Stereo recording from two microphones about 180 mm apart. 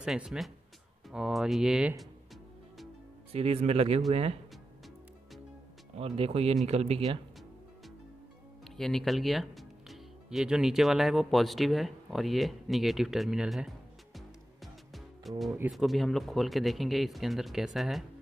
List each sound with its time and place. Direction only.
0.0 s speech: 5° right (ahead or behind)
3.3 s speech: 35° right (ahead or behind)
5.9 s speech: 30° right (ahead or behind)
8.7 s speech: centre (ahead or behind)
14.1 s music: centre (ahead or behind)
15.5 s speech: 5° right (ahead or behind)